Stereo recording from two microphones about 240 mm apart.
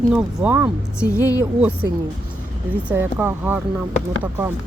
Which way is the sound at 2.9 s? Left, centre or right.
Centre.